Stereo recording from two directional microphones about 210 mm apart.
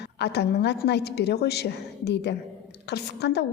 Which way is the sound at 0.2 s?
50° left (ahead or behind).